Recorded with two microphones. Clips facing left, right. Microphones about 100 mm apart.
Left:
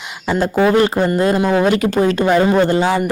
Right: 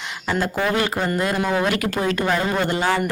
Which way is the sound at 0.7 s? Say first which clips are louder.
Left 8 dB; 30° left (ahead or behind).